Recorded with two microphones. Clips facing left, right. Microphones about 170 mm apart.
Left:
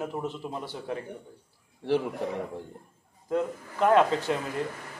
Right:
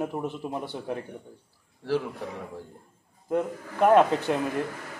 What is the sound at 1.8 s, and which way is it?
Speech, 20° left (ahead or behind).